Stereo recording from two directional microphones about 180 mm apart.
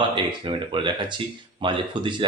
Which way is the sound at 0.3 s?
25° right (ahead or behind).